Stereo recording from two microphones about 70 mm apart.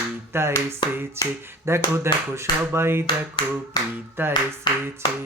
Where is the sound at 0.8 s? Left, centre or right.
Left.